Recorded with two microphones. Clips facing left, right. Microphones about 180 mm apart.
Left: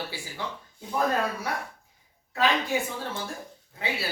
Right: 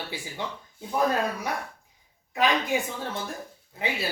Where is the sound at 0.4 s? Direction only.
20° right (ahead or behind).